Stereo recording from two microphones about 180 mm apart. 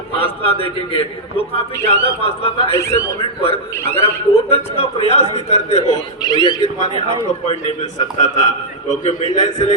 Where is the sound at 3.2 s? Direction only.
35° left (ahead or behind).